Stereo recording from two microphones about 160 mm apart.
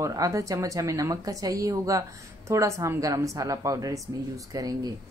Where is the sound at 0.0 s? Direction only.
20° right (ahead or behind).